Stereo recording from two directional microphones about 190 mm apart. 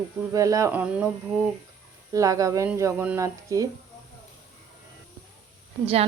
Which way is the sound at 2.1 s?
15° right (ahead or behind).